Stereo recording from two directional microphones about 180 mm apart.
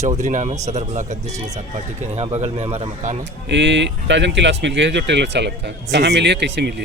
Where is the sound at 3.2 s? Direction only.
80° right.